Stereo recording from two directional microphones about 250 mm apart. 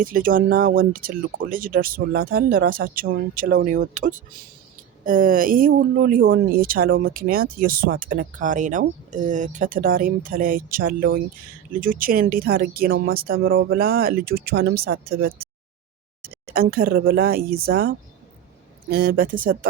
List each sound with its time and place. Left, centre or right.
0.0 s speech: right
16.3 s speech: right